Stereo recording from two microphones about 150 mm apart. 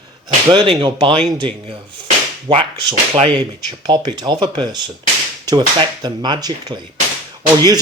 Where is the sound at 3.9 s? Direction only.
30° right (ahead or behind).